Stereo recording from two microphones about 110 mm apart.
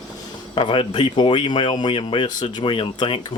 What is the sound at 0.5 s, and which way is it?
Speech, 55° left (ahead or behind).